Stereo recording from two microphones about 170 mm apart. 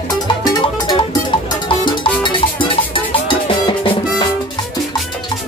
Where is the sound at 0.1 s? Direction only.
25° left (ahead or behind).